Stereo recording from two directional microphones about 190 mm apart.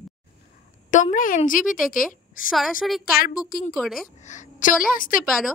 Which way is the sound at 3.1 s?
50° left (ahead or behind).